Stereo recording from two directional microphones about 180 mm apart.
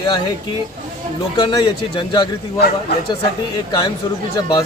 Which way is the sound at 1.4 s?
25° left (ahead or behind).